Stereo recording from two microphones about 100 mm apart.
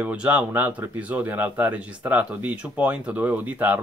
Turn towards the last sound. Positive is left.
turn(degrees=-20)  # may be behind; listen again after turning